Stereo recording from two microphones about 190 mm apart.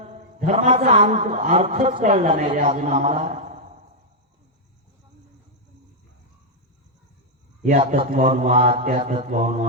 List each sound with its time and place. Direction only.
0.0 s a man's voice: 40° right (ahead or behind)
7.6 s a man's voice: 40° right (ahead or behind)